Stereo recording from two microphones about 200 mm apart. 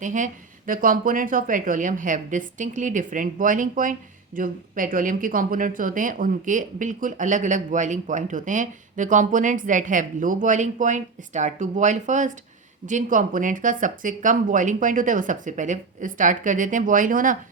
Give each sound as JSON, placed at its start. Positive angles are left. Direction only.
{"t": 0.0, "sound": "speech", "side_deg": -40}